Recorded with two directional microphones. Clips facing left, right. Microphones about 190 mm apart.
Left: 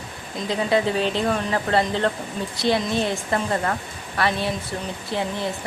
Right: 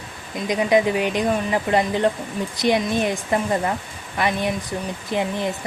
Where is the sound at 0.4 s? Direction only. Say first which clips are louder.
Right 3 dB; 15° right (ahead or behind).